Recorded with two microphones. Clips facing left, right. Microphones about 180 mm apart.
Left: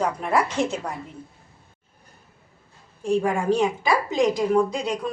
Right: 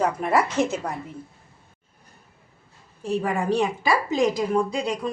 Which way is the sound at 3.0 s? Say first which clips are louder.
Left 3 dB; centre (ahead or behind).